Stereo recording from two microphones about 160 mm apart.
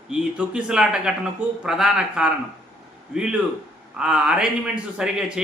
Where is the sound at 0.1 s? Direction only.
5° right (ahead or behind).